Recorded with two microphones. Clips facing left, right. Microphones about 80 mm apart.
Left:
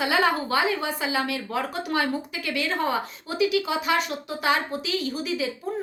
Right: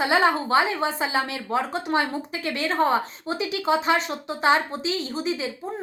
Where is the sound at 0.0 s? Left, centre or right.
Right.